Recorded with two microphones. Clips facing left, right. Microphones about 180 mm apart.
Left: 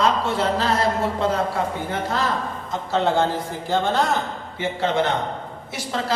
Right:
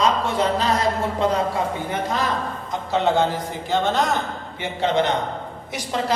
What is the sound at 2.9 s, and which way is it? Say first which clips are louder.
Speech: right 1 dB; 15° right (ahead or behind).